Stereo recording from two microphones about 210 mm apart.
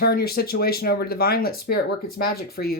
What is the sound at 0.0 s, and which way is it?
Speech, 50° left (ahead or behind).